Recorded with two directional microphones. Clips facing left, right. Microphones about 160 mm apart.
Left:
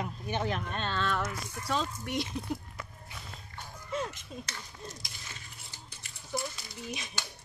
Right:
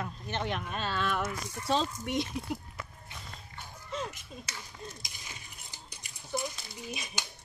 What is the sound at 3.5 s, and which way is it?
Music, 5° left (ahead or behind).